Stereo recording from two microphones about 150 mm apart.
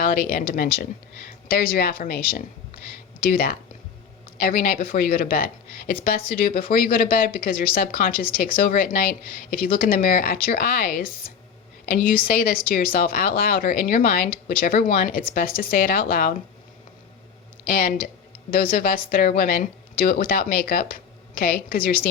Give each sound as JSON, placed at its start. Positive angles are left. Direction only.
{"t": 0.0, "sound": "speech", "side_deg": 80}
{"t": 1.5, "sound": "a woman's voice", "side_deg": 90}
{"t": 4.4, "sound": "speech", "side_deg": 80}
{"t": 17.7, "sound": "speech", "side_deg": 90}
{"t": 18.5, "sound": "speech", "side_deg": 80}